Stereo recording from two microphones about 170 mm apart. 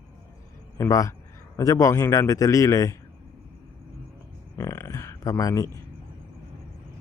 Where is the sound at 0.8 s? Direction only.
20° left (ahead or behind).